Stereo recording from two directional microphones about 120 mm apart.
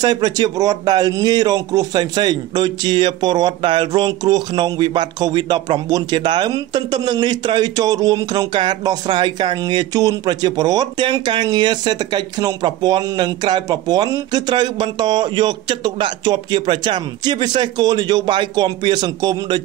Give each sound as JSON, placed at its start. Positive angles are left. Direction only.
{"t": 0.0, "sound": "speech", "side_deg": -35}